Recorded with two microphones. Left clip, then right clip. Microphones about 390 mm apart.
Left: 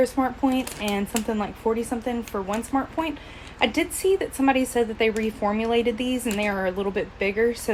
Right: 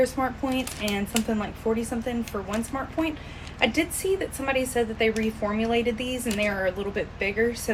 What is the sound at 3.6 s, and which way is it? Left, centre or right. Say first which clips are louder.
Speech: left 2 dB; left.